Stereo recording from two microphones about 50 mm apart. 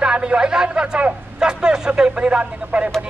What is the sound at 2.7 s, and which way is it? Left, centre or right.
Speech, right.